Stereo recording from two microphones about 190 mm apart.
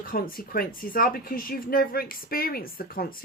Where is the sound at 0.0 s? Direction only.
50° left (ahead or behind).